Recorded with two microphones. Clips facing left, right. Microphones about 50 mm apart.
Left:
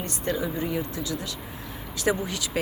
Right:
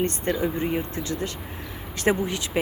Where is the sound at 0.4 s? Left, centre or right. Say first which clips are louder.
Right 3 dB; right.